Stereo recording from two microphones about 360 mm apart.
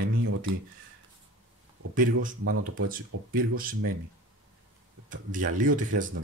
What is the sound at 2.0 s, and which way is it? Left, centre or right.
Speech, right.